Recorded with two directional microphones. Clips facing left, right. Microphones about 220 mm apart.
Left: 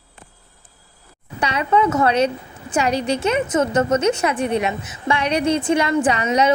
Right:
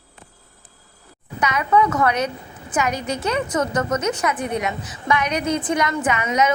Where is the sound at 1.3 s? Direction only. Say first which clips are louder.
Even; 30° left (ahead or behind).